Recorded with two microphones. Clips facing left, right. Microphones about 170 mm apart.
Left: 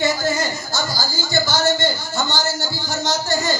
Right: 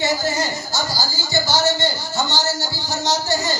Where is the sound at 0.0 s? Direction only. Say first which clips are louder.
Left 1 dB; 50° left (ahead or behind).